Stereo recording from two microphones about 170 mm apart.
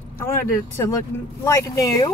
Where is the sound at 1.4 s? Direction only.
20° left (ahead or behind).